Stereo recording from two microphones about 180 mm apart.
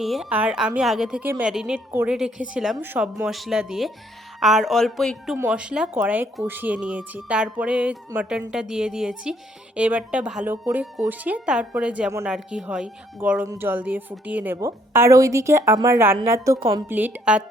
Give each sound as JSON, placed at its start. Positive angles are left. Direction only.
{"t": 0.0, "sound": "a woman's voice", "side_deg": 0}